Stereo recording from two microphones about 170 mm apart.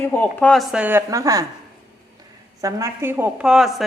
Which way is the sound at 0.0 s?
10° left (ahead or behind).